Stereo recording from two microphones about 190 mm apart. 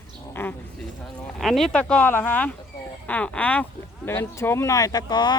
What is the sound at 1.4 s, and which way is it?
Speech, centre (ahead or behind).